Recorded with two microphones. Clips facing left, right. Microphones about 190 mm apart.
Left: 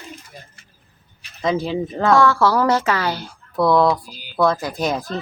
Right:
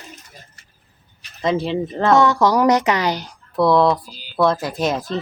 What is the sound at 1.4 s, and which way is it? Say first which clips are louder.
Speech: right 1 dB; centre (ahead or behind).